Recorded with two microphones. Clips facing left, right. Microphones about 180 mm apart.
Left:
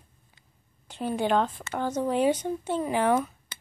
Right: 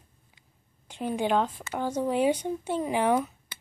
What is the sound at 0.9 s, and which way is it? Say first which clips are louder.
A woman's voice: left 1 dB; 15° right (ahead or behind).